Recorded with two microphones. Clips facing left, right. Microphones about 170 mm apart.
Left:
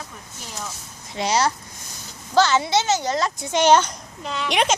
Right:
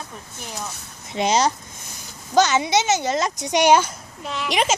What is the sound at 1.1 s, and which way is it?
A child's voice, 20° right (ahead or behind).